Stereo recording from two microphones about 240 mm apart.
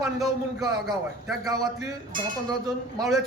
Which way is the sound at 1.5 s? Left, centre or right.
Centre.